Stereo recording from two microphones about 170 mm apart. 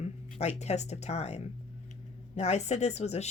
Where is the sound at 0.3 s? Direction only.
40° left (ahead or behind).